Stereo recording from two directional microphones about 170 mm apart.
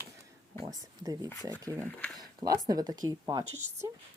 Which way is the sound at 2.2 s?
20° right (ahead or behind).